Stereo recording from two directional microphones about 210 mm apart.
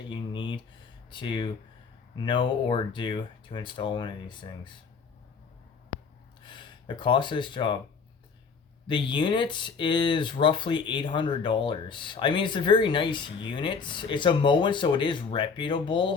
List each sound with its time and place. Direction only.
0.1 s a sound: 25° left (ahead or behind)
1.1 s speech: 20° left (ahead or behind)
6.4 s speech: 20° left (ahead or behind)
8.9 s speech: 20° left (ahead or behind)